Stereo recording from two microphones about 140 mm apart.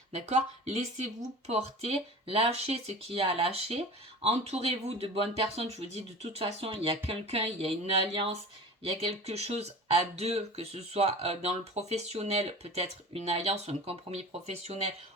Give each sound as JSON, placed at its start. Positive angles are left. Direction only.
{"t": 0.1, "sound": "speech", "side_deg": -50}